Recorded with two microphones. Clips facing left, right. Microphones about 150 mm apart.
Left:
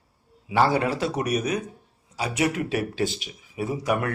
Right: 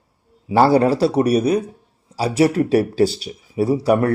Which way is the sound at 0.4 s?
35° right (ahead or behind).